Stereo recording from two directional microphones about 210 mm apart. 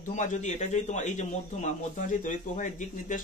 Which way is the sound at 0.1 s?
35° left (ahead or behind).